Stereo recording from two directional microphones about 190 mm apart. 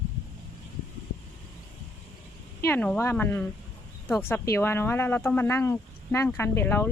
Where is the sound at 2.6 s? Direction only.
10° left (ahead or behind).